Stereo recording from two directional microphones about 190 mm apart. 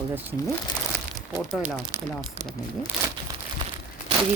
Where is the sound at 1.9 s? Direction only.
10° right (ahead or behind).